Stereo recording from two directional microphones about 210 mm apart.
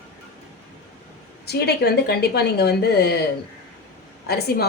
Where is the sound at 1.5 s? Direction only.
50° left (ahead or behind).